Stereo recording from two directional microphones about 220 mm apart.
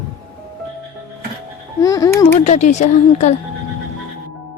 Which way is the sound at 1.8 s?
15° left (ahead or behind).